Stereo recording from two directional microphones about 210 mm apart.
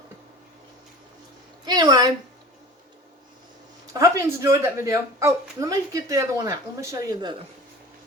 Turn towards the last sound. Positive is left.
turn(degrees=-15)  # may be behind; listen again after turning